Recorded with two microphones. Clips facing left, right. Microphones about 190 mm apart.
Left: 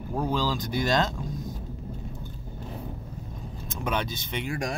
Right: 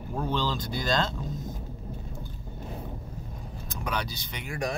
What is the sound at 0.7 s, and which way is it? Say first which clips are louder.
Speech: left 4 dB; 20° left (ahead or behind).